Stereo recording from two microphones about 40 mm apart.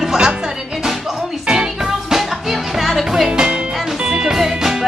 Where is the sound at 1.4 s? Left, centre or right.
Centre.